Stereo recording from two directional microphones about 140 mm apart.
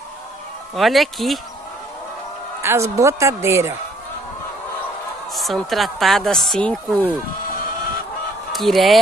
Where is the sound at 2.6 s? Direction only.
20° right (ahead or behind).